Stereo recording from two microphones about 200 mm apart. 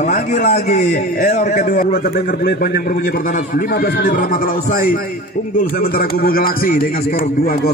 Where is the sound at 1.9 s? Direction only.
50° left (ahead or behind).